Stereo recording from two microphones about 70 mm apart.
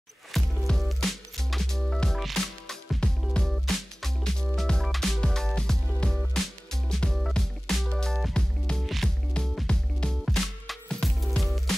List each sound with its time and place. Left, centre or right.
0.3 s music: centre
9.4 s music: centre
10.2 s music: centre